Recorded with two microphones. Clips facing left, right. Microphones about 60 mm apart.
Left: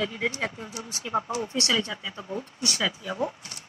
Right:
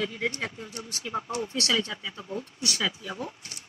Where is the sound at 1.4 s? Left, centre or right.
Left.